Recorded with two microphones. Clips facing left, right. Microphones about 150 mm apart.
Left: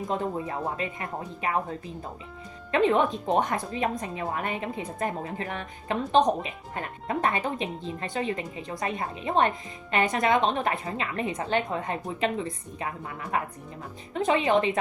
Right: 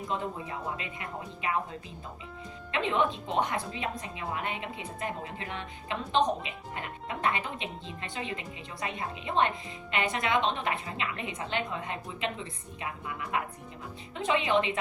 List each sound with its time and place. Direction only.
0.1 s speech: 40° left (ahead or behind)
2.7 s a woman's voice: 40° left (ahead or behind)